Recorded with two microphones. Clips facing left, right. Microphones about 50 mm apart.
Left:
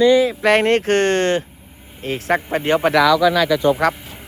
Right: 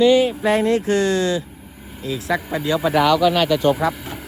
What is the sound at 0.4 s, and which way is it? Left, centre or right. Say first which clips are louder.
Speech: left 3 dB; left.